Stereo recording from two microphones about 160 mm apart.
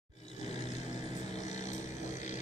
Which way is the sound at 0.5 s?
45° left (ahead or behind).